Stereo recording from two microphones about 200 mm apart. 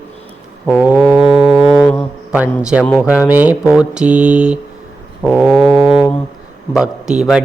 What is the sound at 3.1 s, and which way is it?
Mantra, 5° right (ahead or behind).